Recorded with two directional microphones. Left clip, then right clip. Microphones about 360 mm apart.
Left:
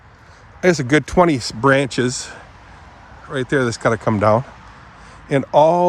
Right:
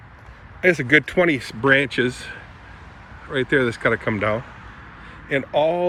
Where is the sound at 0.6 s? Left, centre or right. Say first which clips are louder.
Left 1 dB; centre.